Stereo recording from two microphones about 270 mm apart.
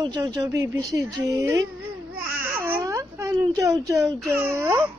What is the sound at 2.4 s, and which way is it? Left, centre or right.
Wail, centre.